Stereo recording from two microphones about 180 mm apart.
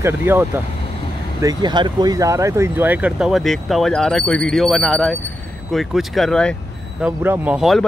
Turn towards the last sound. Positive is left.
turn(degrees=0)  # may be behind; listen again after turning